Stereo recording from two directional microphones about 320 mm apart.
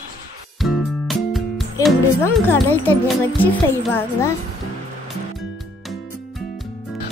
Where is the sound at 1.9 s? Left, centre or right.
Centre.